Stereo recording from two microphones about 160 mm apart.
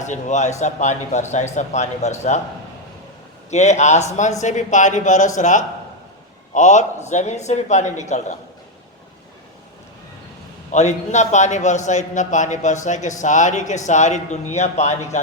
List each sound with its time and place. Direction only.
0.0 s a man's voice: 50° left (ahead or behind)
3.5 s a man's voice: 45° left (ahead or behind)
10.7 s a man's voice: 45° left (ahead or behind)